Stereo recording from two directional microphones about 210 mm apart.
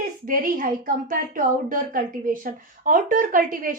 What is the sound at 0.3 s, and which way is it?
A woman's voice, 40° right (ahead or behind).